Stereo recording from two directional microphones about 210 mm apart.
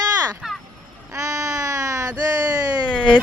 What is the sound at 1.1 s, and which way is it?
Baby cry, 15° right (ahead or behind).